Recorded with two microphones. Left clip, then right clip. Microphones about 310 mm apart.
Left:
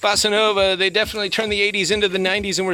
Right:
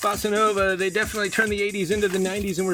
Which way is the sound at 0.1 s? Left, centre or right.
Centre.